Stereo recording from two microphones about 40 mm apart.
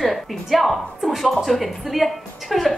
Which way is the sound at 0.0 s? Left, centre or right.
Centre.